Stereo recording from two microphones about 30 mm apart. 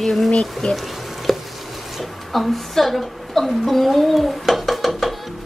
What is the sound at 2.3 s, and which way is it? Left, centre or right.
A woman's voice, centre.